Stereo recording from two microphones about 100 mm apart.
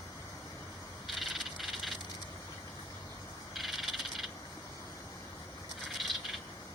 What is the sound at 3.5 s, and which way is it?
Frog, centre (ahead or behind).